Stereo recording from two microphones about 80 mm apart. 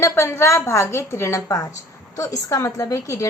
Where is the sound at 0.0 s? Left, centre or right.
Left.